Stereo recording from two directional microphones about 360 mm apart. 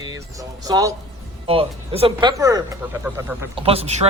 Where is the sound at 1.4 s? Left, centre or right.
Centre.